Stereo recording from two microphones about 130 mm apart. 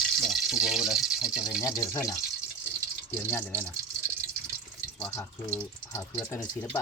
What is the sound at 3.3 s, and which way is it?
Speech, 15° left (ahead or behind).